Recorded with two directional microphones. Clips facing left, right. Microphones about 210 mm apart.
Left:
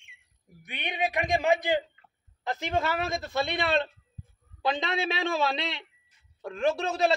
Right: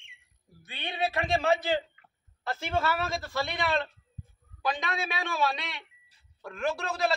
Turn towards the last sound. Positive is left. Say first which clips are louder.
# left 4 dB
turn(degrees=25)  # may be behind; listen again after turning